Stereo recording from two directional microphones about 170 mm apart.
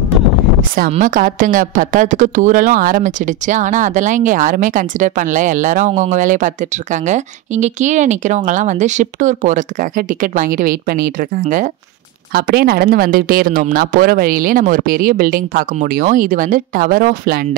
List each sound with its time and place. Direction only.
0.6 s a woman's voice: 55° right (ahead or behind)
12.3 s speech: 65° right (ahead or behind)